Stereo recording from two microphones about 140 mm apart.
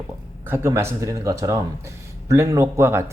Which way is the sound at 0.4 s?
20° right (ahead or behind).